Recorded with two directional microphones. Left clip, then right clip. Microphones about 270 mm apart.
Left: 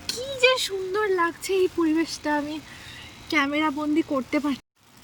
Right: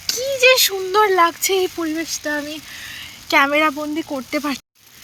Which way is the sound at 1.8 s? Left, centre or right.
Centre.